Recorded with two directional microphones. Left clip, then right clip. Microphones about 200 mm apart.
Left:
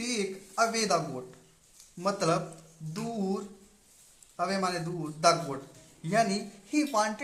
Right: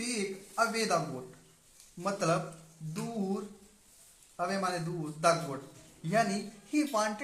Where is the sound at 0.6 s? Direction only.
20° left (ahead or behind).